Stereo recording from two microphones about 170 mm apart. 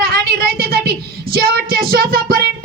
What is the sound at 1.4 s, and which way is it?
Child singing, 65° right (ahead or behind).